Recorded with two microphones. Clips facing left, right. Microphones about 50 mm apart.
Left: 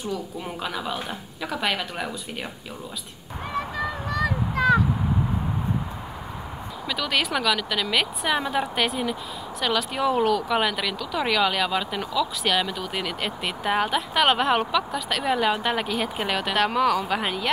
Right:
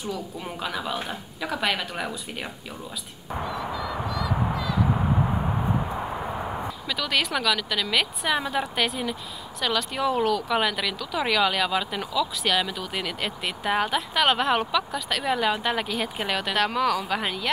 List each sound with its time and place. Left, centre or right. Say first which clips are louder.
0.6 s speech: right 1 dB; centre
3.4 s honk: left 4 dB; left
6.9 s speech: left 1 dB; centre